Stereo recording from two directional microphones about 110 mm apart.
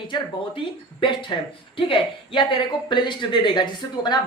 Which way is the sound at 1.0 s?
45° left (ahead or behind).